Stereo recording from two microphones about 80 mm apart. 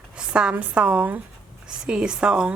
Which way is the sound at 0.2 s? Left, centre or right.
Centre.